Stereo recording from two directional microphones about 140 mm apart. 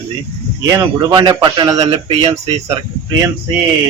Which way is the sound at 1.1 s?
30° right (ahead or behind).